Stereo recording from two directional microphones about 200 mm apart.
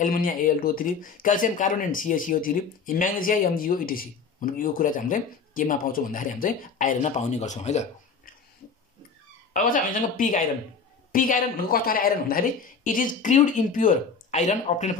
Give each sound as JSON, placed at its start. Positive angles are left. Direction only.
{"t": 0.0, "sound": "speech", "side_deg": 45}
{"t": 9.5, "sound": "speech", "side_deg": 40}